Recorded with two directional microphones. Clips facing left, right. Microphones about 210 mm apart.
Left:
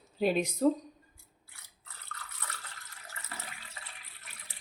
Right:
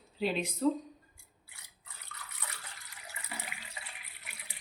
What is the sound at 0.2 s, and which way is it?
Speech, 45° left (ahead or behind).